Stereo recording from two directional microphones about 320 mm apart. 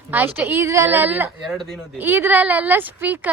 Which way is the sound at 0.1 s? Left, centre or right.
Centre.